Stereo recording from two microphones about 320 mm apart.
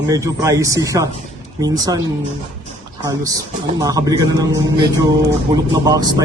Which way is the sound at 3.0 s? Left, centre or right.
Centre.